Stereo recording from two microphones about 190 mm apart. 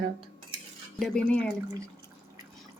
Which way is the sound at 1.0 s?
5° left (ahead or behind).